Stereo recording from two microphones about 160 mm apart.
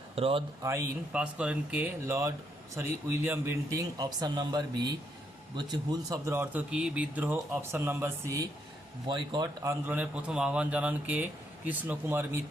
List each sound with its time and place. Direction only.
0.2 s speech: 35° right (ahead or behind)
0.6 s speech: 20° right (ahead or behind)
1.1 s speech: 5° right (ahead or behind)
9.0 s speech: 30° right (ahead or behind)
9.6 s speech: 10° right (ahead or behind)